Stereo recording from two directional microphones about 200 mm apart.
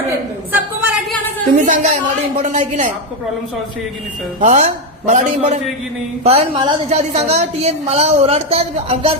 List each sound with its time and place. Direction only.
0.5 s a sound: 10° right (ahead or behind)
1.5 s a woman's voice: 40° right (ahead or behind)
4.4 s a woman's voice: 35° right (ahead or behind)